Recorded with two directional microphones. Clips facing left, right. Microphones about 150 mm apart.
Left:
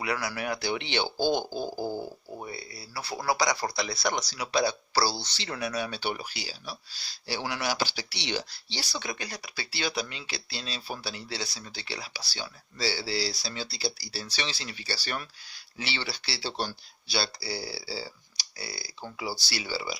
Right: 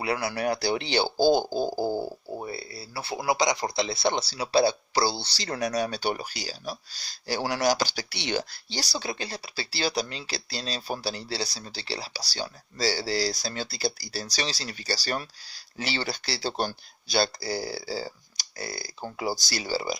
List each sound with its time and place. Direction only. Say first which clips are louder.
0.0 s speech: right 4 dB; 30° right (ahead or behind)